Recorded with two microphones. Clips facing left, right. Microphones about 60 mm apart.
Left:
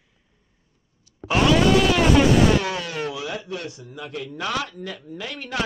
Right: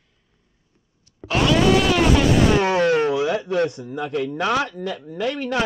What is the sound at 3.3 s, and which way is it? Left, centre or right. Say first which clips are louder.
A man's voice: right 10 dB; right.